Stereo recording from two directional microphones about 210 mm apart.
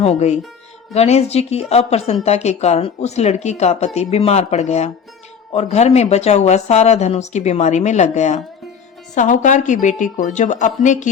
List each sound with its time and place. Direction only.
0.0 s speech: 30° left (ahead or behind)